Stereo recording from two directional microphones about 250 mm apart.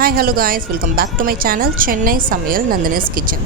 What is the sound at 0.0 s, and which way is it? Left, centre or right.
Speech, right.